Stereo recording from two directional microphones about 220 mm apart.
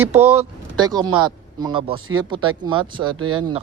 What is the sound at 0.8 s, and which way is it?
Speech, 15° right (ahead or behind).